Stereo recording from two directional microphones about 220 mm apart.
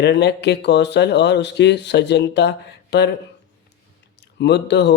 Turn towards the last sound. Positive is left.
turn(degrees=50)  # may be behind; listen again after turning